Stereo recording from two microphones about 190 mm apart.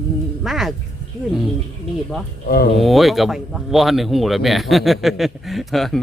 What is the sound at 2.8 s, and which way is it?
Speech, centre (ahead or behind).